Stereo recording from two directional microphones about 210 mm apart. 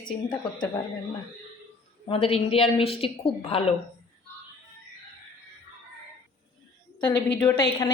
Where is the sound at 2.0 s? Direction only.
25° left (ahead or behind).